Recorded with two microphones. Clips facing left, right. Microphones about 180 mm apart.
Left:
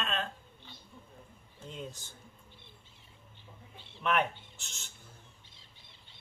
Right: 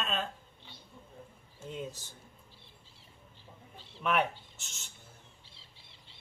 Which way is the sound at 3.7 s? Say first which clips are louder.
Right 1 dB; 40° right (ahead or behind).